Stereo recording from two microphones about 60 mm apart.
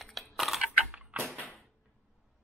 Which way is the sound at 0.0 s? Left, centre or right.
Centre.